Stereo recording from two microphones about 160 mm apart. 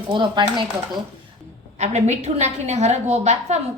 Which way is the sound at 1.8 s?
45° right (ahead or behind).